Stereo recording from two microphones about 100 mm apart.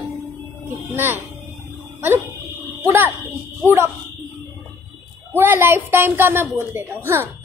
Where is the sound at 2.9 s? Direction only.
20° right (ahead or behind).